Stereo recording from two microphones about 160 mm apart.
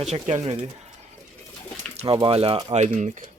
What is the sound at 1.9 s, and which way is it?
Speech, 30° right (ahead or behind).